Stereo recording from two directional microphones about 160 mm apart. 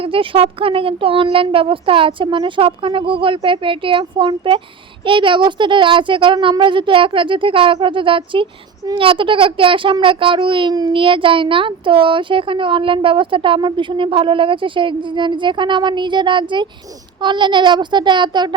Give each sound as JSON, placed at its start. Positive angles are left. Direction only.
{"t": 0.0, "sound": "a child's voice", "side_deg": -35}